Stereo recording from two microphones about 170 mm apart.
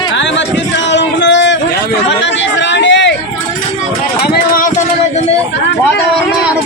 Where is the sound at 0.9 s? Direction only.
90° left.